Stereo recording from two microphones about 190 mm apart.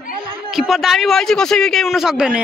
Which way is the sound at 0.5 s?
Centre (ahead or behind).